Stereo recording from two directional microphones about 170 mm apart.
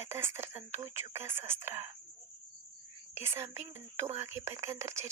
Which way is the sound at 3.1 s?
15° right (ahead or behind).